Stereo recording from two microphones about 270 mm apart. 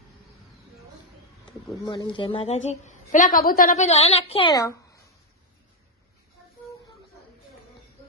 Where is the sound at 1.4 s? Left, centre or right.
Centre.